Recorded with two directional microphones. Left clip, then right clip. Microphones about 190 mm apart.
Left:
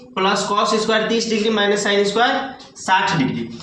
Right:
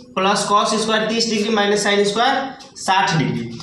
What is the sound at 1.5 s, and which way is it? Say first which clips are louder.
Speech: right 2 dB; 20° right (ahead or behind).